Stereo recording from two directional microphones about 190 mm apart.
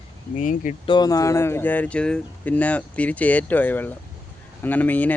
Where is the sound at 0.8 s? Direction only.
20° left (ahead or behind).